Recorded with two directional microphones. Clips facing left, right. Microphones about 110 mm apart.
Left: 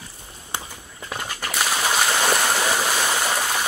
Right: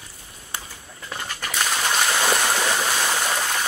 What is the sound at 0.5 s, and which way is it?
Walk, 20° left (ahead or behind).